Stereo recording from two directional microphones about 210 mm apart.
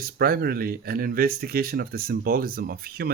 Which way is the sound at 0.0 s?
45° right (ahead or behind).